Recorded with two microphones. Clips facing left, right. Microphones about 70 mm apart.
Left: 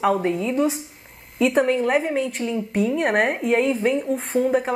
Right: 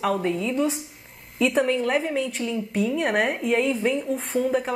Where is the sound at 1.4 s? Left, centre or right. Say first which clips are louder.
Left 3 dB; centre.